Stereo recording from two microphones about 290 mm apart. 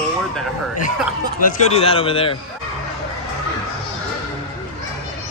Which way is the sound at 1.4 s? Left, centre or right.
Left.